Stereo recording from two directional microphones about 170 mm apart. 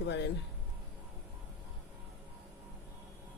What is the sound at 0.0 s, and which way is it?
Speech, 90° left.